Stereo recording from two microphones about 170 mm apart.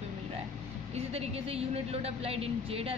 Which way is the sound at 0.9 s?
35° right (ahead or behind).